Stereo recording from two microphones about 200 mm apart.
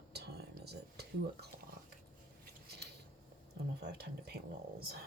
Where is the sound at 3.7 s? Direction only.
55° right (ahead or behind).